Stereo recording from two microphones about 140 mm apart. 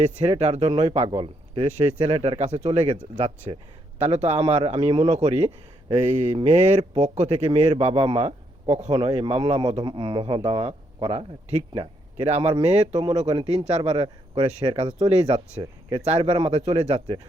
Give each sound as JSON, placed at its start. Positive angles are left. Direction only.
{"t": 0.0, "sound": "speech", "side_deg": -50}
{"t": 3.2, "sound": "speech", "side_deg": -50}
{"t": 5.9, "sound": "mantra", "side_deg": -60}
{"t": 6.9, "sound": "speech", "side_deg": -55}
{"t": 13.3, "sound": "speech", "side_deg": -35}